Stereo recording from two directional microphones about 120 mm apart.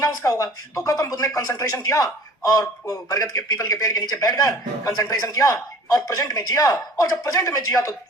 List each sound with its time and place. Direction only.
0.0 s a man's voice: 30° left (ahead or behind)